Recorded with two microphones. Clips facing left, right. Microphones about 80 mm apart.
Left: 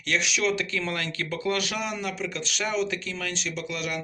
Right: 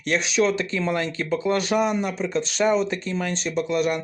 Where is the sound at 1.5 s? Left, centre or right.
Right.